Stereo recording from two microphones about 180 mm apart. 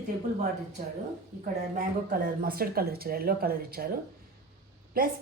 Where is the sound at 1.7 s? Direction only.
55° right (ahead or behind).